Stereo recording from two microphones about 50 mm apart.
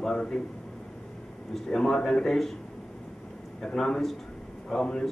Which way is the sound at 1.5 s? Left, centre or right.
Centre.